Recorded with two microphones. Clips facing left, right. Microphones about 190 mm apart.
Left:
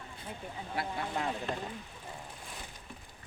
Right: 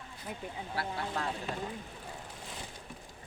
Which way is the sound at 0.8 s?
20° left (ahead or behind).